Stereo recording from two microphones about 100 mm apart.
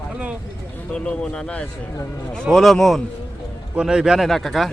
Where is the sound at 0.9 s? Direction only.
10° left (ahead or behind).